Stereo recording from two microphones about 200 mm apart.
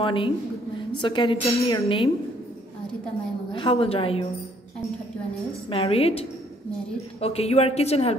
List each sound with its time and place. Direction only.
0.0 s a woman's voice: 25° left (ahead or behind)
3.5 s a woman's voice: 25° left (ahead or behind)
5.7 s a woman's voice: 30° left (ahead or behind)